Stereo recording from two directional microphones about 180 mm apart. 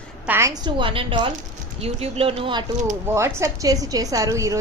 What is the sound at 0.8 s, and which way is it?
A woman's voice, 30° right (ahead or behind).